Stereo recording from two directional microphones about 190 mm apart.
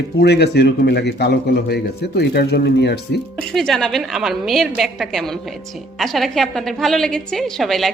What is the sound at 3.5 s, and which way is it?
A woman's voice, centre (ahead or behind).